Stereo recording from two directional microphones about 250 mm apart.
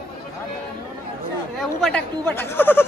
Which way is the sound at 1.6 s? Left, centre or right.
Centre.